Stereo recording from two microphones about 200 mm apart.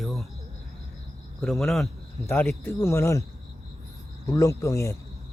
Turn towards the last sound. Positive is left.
turn(degrees=15)  # may be behind; listen again after turning